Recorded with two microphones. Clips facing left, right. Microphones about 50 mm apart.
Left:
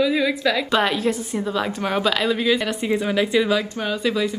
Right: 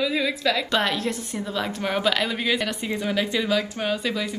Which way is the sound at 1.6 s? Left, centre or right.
Centre.